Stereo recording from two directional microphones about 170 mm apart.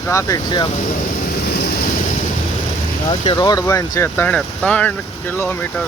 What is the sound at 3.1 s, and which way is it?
Speech, 25° left (ahead or behind).